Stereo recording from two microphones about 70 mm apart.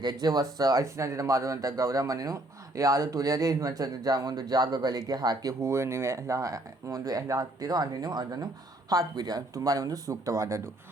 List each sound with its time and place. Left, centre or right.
0.0 s speech: right
0.9 s a man's voice: right
5.6 s a man's voice: right
8.9 s a man's voice: right